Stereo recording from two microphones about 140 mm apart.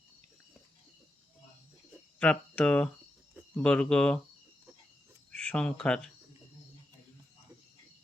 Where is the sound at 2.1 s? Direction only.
5° left (ahead or behind).